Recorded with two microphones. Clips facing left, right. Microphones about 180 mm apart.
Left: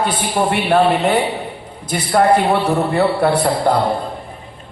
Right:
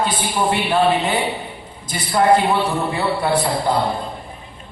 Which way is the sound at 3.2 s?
60° left (ahead or behind).